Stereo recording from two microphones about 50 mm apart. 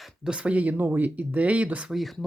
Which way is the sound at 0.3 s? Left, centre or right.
Right.